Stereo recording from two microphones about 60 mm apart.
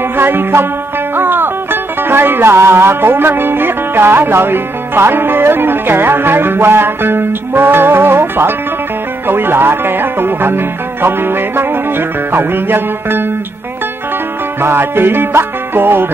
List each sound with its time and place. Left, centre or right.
0.2 s music: right
14.6 s music: right